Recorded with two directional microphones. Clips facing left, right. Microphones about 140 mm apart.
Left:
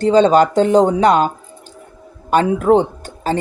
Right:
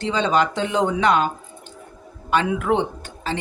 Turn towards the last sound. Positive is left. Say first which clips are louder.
# left 7 dB
turn(degrees=40)  # may be behind; listen again after turning